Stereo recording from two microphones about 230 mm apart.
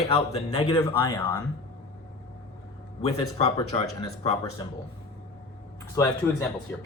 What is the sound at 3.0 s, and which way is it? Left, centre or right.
Speech, left.